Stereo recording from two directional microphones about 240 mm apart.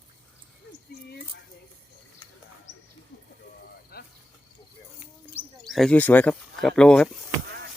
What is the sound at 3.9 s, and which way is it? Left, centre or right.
Cricket, left.